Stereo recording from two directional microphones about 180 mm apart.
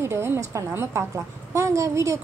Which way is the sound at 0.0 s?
15° right (ahead or behind).